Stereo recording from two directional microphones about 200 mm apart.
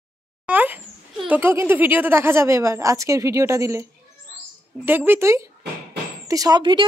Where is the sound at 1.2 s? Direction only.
10° right (ahead or behind).